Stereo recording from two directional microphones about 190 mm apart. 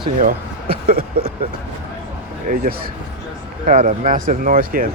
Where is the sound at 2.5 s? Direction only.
50° right (ahead or behind).